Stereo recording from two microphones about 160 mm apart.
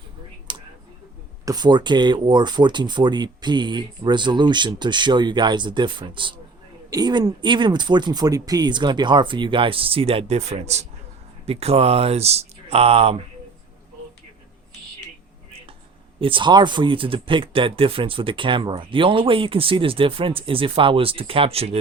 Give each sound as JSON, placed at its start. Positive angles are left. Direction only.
{"t": 0.5, "sound": "a sound", "side_deg": -30}
{"t": 1.5, "sound": "speech", "side_deg": -25}
{"t": 16.2, "sound": "speech", "side_deg": -30}